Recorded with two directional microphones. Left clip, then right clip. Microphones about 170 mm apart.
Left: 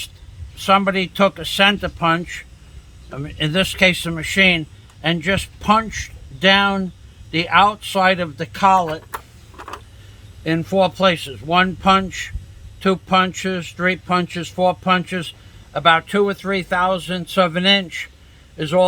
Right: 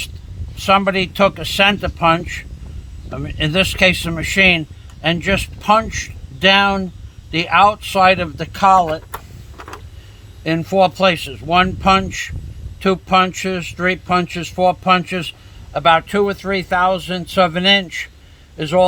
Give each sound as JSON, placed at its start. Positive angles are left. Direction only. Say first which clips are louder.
{"t": 0.5, "sound": "speech", "louder": "right 2 dB", "side_deg": -25}
{"t": 10.4, "sound": "speech", "louder": "right 3 dB", "side_deg": -25}